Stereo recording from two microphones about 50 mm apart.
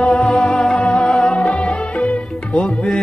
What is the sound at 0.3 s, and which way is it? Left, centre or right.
Music, centre.